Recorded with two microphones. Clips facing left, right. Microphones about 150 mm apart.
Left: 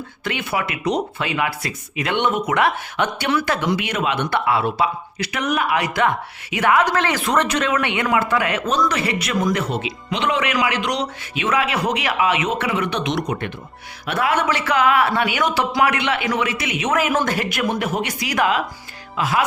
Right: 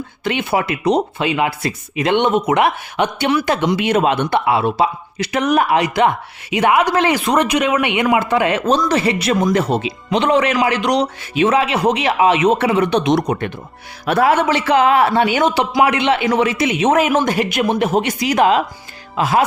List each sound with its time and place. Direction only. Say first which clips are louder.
0.3 s speech: right 6 dB; 25° right (ahead or behind)
4.3 s speech: right 4 dB; 20° right (ahead or behind)
5.8 s speech: right 4 dB; 20° right (ahead or behind)